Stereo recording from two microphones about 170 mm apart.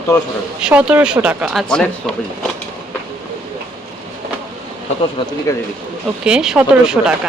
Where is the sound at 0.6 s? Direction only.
5° right (ahead or behind).